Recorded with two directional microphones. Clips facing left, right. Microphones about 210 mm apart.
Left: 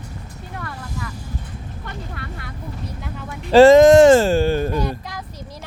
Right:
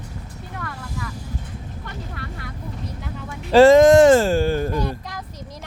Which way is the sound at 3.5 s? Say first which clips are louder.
Left 2 dB; 25° left (ahead or behind).